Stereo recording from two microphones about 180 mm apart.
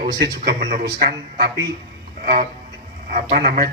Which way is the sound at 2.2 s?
40° right (ahead or behind).